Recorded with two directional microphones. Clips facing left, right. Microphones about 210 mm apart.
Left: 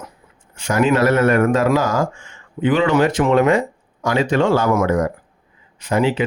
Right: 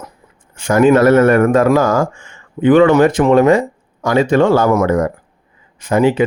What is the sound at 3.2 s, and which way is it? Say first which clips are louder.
Speech: right 5 dB; 35° right (ahead or behind).